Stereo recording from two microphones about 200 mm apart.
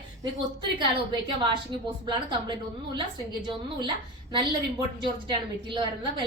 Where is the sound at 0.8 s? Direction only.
25° right (ahead or behind).